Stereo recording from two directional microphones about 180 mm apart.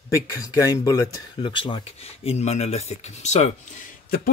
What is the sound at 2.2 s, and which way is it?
Speech, 35° left (ahead or behind).